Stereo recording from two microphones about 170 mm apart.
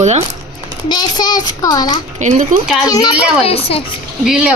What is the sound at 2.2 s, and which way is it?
Speech, 45° right (ahead or behind).